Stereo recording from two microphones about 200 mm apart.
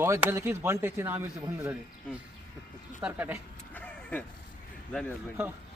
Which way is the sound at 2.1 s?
5° left (ahead or behind).